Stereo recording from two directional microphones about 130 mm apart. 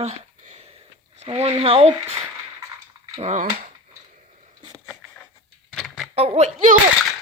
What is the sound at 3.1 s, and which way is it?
Speech, 65° right (ahead or behind).